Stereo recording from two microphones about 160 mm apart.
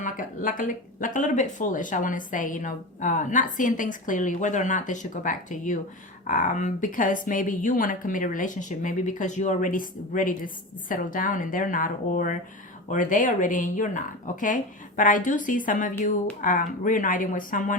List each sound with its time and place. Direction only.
0.0 s a woman's voice: 55° left (ahead or behind)